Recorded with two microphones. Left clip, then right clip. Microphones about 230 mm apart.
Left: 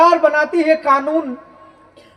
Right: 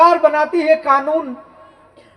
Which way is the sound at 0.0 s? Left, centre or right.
Left.